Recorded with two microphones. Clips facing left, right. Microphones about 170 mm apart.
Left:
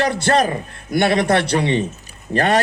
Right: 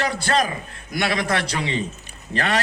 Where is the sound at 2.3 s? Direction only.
45° left (ahead or behind).